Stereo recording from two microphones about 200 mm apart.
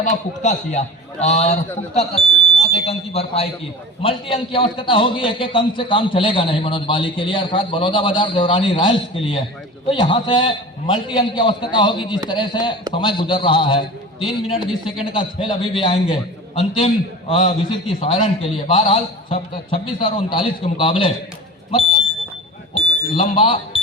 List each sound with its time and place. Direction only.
0.0 s a man's voice: 40° left (ahead or behind)
14.9 s a man's voice: 25° left (ahead or behind)
22.7 s smoke detector: 25° left (ahead or behind)